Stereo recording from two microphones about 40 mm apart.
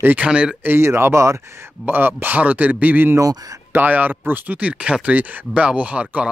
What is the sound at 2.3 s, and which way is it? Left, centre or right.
Speech, right.